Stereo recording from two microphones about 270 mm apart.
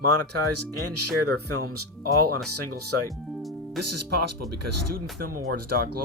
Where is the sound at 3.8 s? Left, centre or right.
Right.